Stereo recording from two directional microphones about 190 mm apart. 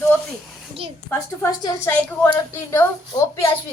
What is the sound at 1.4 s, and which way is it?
A woman's voice, 15° left (ahead or behind).